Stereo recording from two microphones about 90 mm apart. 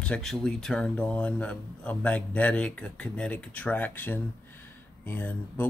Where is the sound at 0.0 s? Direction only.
10° left (ahead or behind).